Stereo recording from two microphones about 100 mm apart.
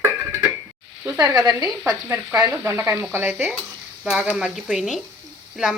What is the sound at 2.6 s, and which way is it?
Stir, 25° right (ahead or behind).